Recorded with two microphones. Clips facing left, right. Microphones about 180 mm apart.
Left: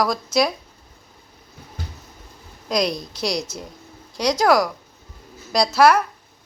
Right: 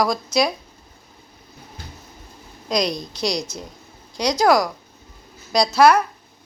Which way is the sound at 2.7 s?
5° left (ahead or behind).